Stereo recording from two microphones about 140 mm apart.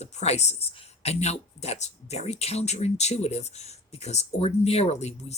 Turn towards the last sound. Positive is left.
turn(degrees=50)  # may be behind; listen again after turning